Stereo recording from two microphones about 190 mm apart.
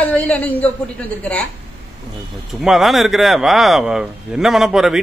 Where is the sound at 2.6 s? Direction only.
Centre (ahead or behind).